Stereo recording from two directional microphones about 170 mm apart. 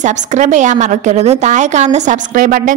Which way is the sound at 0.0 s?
45° right (ahead or behind).